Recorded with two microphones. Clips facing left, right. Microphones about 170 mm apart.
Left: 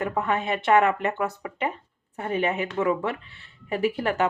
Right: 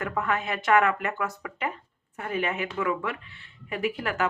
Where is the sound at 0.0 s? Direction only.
25° left (ahead or behind).